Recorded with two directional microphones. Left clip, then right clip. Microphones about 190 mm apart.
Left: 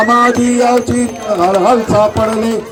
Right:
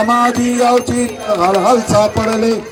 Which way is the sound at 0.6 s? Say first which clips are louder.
Right 1 dB; 20° right (ahead or behind).